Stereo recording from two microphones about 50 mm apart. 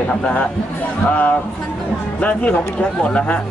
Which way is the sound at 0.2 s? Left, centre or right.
Left.